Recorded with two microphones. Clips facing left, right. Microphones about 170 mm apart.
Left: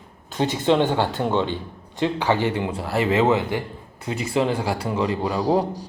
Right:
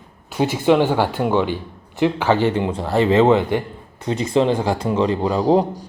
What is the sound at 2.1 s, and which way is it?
Speech, 15° left (ahead or behind).